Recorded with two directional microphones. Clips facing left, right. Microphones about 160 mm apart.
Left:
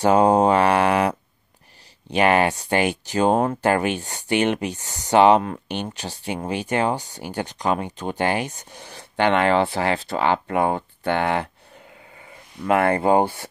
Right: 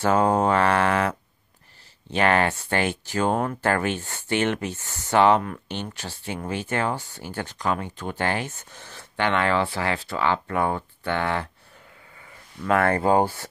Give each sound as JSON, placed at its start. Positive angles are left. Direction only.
{"t": 0.0, "sound": "mantra", "side_deg": 15}
{"t": 2.0, "sound": "speech", "side_deg": 15}
{"t": 12.6, "sound": "speech", "side_deg": 15}